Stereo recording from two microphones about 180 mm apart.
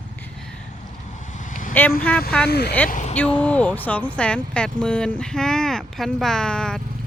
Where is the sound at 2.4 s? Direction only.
65° left (ahead or behind).